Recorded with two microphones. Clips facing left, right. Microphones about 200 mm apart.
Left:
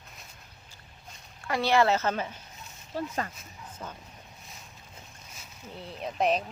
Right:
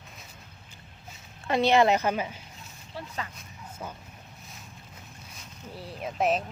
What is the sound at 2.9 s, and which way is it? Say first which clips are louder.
Speech: left 7 dB; 45° left (ahead or behind).